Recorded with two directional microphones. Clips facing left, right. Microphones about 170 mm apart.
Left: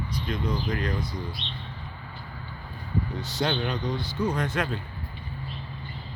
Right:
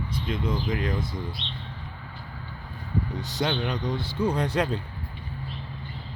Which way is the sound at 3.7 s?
20° right (ahead or behind).